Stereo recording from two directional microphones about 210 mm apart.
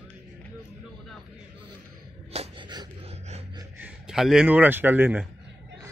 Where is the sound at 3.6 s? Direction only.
5° right (ahead or behind).